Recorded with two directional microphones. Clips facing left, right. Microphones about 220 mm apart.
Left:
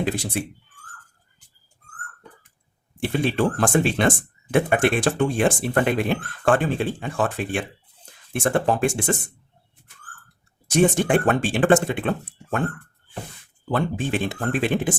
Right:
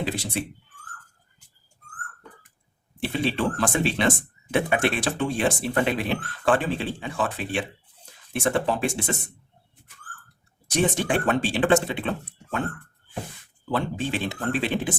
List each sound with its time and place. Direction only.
3.1 s speech: 50° left (ahead or behind)
10.7 s speech: 50° left (ahead or behind)
13.7 s speech: 50° left (ahead or behind)